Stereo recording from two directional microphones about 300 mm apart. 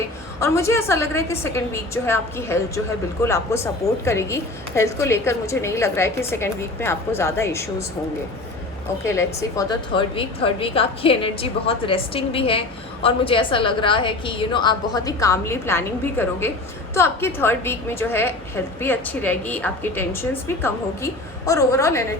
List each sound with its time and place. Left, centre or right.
0.3 s a woman's voice: centre
9.0 s a woman's voice: centre